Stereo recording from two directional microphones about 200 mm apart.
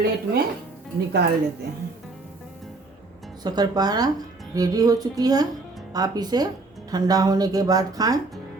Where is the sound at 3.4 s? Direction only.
20° right (ahead or behind).